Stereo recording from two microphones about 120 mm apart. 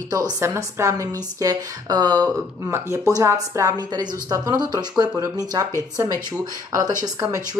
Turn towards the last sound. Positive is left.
turn(degrees=-30)  # may be behind; listen again after turning